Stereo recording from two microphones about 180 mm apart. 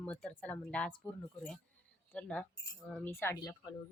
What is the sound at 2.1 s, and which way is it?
Speech, 5° left (ahead or behind).